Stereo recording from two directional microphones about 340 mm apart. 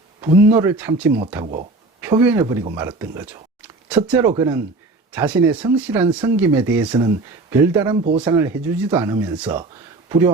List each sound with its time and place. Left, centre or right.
0.2 s speech: centre